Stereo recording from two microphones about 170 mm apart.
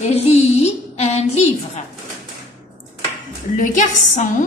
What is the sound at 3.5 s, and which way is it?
Speech, 50° left (ahead or behind).